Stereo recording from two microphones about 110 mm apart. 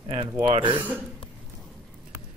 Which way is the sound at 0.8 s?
15° right (ahead or behind).